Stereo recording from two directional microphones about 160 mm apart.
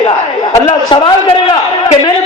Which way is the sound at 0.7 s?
30° left (ahead or behind).